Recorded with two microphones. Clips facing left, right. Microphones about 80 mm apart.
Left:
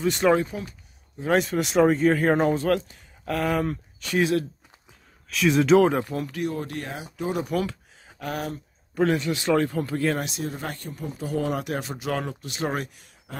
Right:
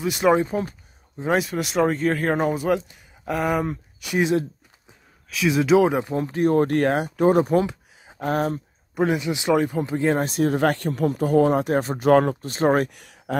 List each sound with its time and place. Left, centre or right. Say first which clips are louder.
0.0 s speech: even; centre
0.5 s speech: right 8 dB; right
1.3 s speech: left 1 dB; centre; by 4.5 s right
5.3 s speech: even; centre
5.9 s speech: right 4 dB; right
6.4 s speech: right 11 dB; right
7.6 s a sound: right 3 dB; right
8.3 s speech: right 7 dB; right
8.9 s speech: right 1 dB; centre
10.2 s speech: right 10 dB; right
10.5 s speech: right 13 dB; right
11.2 s speech: right 8 dB; right
12.9 s speech: right 13 dB; right